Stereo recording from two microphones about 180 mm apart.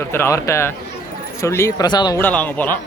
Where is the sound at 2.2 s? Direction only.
10° left (ahead or behind).